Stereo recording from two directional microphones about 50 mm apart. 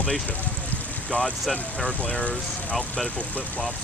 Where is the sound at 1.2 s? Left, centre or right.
Centre.